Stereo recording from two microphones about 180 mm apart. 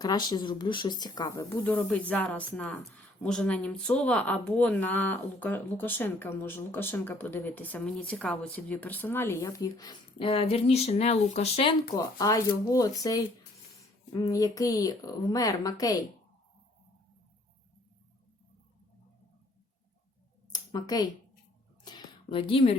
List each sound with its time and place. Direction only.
0.0 s speech: 20° left (ahead or behind)
11.9 s speech: 20° left (ahead or behind)
20.5 s a sound: 20° left (ahead or behind)